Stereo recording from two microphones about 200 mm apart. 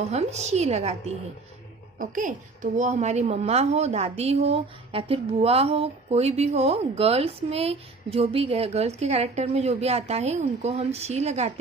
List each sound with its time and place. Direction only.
0.0 s speech: 35° right (ahead or behind)